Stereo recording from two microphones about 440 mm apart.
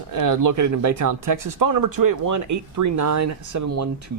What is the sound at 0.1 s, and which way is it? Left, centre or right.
Speech, right.